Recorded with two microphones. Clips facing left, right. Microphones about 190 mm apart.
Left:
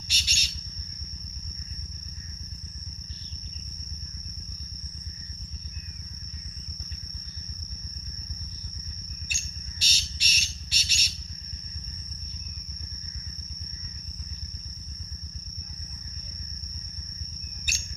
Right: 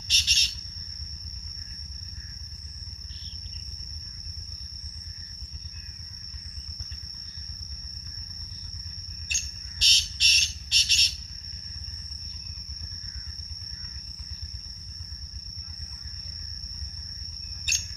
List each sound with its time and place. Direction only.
0.1 s bird: 10° left (ahead or behind)
9.3 s bird: 10° left (ahead or behind)
17.7 s cricket: 5° left (ahead or behind)